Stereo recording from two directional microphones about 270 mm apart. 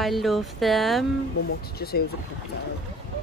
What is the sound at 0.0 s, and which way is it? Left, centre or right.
Speech, centre.